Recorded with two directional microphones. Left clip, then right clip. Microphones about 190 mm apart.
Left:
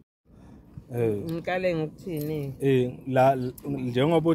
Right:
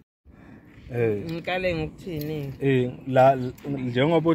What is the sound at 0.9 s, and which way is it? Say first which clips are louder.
Speech: right 2 dB; centre (ahead or behind).